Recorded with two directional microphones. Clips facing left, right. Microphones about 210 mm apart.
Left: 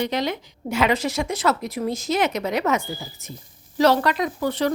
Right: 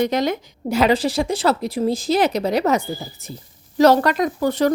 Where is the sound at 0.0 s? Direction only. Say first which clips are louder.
Right 5 dB; 45° right (ahead or behind).